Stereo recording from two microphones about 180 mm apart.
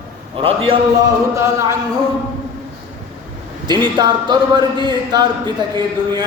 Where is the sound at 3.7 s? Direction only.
25° right (ahead or behind).